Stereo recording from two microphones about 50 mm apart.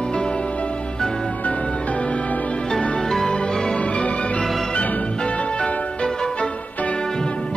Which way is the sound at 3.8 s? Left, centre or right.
Left.